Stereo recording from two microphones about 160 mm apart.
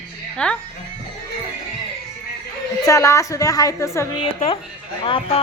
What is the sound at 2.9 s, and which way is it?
A woman's voice, 20° left (ahead or behind).